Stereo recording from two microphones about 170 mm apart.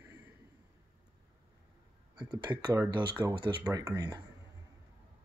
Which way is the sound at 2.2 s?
25° right (ahead or behind).